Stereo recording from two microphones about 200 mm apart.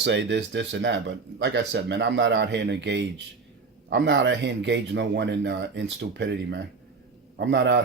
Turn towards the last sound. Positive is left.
turn(degrees=-60)  # may be behind; listen again after turning